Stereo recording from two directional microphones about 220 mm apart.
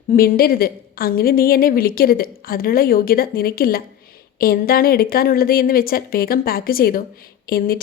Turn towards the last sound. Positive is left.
turn(degrees=40)  # may be behind; listen again after turning